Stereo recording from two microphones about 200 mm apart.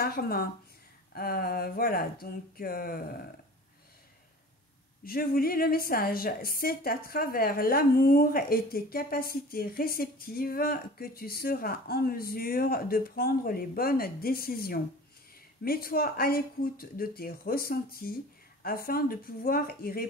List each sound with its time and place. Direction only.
0.0 s a woman's voice: 50° left (ahead or behind)
5.0 s a woman's voice: 50° left (ahead or behind)